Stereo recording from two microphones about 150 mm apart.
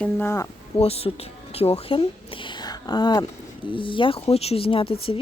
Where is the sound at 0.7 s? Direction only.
40° left (ahead or behind).